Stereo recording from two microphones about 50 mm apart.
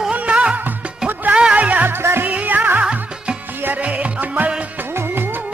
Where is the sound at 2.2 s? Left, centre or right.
Right.